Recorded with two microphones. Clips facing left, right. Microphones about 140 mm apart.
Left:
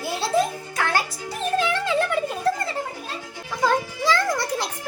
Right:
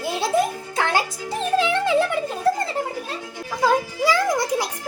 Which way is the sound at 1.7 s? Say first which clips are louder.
Right 3 dB; 15° right (ahead or behind).